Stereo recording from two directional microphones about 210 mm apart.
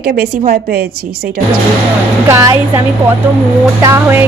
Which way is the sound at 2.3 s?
15° right (ahead or behind).